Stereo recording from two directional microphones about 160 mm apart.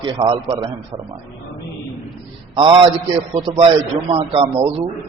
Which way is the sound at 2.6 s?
30° right (ahead or behind).